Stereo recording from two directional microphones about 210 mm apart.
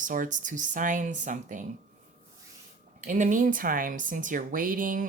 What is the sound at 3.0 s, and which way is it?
Speech, 35° right (ahead or behind).